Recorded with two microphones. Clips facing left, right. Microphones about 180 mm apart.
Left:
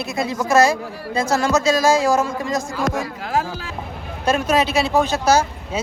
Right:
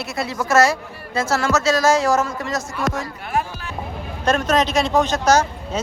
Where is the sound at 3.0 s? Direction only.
90° left.